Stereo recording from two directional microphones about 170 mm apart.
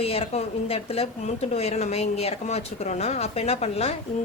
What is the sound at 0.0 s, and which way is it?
Speech, 35° left (ahead or behind).